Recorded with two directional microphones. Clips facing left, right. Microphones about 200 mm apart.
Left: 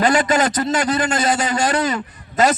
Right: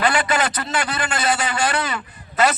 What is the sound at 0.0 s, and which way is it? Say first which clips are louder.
A man's voice: left 4 dB; 40° left (ahead or behind).